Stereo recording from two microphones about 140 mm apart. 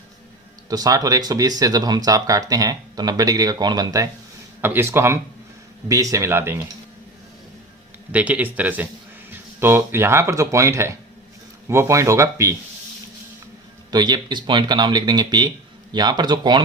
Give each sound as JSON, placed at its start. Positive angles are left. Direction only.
{"t": 0.7, "sound": "speech", "side_deg": -25}
{"t": 8.1, "sound": "speech", "side_deg": -10}
{"t": 13.9, "sound": "speech", "side_deg": -30}